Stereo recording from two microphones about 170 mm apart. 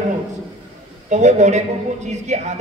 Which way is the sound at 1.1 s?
45° right (ahead or behind).